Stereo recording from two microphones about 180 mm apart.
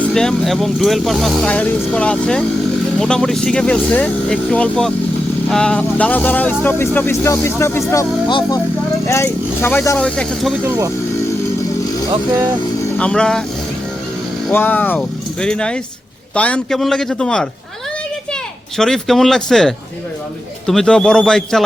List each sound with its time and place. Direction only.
0.1 s speech: 5° left (ahead or behind)
10.6 s speech: 15° right (ahead or behind)
13.0 s speech: 5° left (ahead or behind)
14.5 s speech: 10° left (ahead or behind)
18.8 s speech: centre (ahead or behind)